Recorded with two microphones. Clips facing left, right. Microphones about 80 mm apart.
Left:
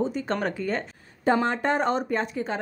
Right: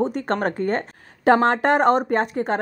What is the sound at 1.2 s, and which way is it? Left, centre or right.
A woman's voice, right.